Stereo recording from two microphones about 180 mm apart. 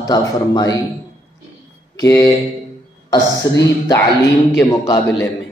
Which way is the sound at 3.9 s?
15° left (ahead or behind).